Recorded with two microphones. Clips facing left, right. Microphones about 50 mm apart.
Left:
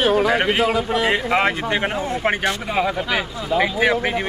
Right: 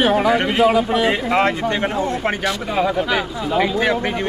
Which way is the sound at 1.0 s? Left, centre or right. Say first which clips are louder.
Right 1 dB; centre.